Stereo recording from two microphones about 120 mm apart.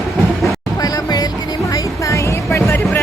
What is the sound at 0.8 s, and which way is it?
Music, 35° left (ahead or behind).